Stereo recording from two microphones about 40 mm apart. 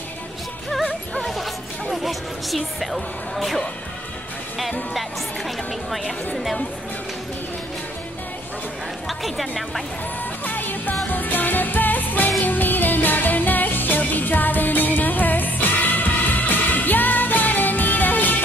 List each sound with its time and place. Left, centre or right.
1.2 s speech: centre
9.2 s a woman's voice: centre
10.4 s music: left